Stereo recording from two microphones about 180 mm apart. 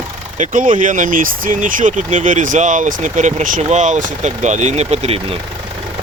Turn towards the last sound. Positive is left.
turn(degrees=-35)  # may be behind; listen again after turning